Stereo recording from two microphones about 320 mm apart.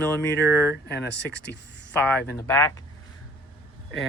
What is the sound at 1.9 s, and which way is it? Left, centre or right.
Speech, centre.